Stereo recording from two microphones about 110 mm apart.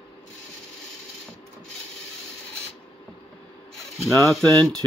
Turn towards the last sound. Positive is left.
turn(degrees=5)  # may be behind; listen again after turning